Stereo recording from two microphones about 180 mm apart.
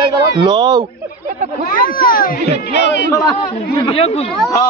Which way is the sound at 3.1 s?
20° left (ahead or behind).